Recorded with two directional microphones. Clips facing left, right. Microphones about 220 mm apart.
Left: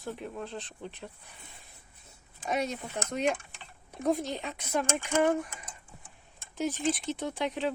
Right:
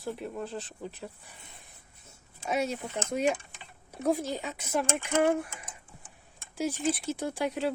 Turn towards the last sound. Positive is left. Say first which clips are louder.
# right 1 dB
turn(degrees=-10)  # may be behind; listen again after turning